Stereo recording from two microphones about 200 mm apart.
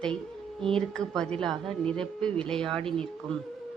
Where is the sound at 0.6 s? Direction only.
5° left (ahead or behind).